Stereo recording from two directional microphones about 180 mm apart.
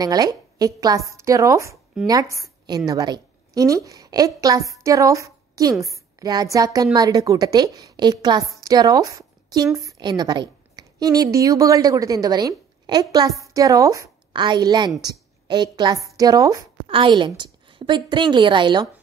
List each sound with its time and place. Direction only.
0.0 s a woman's voice: 20° right (ahead or behind)